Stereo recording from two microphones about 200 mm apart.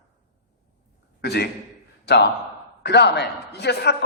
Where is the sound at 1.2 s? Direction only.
55° left (ahead or behind).